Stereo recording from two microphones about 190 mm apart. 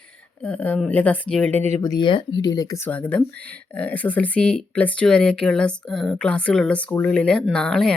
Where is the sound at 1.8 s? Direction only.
20° left (ahead or behind).